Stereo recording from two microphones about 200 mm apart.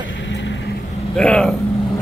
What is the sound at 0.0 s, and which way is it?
Vehicle, 65° left (ahead or behind).